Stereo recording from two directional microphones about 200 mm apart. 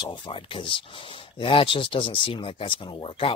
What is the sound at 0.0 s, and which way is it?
Speech, 25° left (ahead or behind).